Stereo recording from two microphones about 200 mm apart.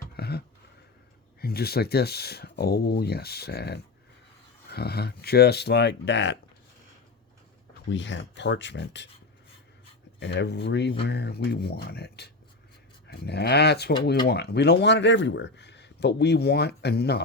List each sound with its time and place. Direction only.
0.2 s a sound: 55° left (ahead or behind)
1.4 s speech: 50° left (ahead or behind)
7.9 s speech: 65° left (ahead or behind)
10.2 s speech: 60° left (ahead or behind)